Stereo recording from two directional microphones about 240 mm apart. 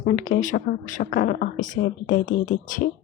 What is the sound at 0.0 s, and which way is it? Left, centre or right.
Speech, left.